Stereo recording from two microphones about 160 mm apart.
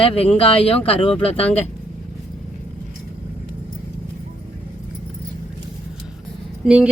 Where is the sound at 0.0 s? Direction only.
35° left (ahead or behind).